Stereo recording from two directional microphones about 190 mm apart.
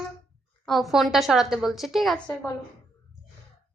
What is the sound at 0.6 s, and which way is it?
A woman's voice, centre (ahead or behind).